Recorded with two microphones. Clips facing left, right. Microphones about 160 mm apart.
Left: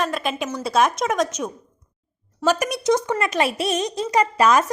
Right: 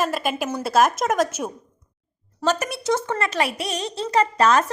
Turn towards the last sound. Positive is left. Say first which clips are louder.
# left 1 dB
turn(degrees=10)  # may be behind; listen again after turning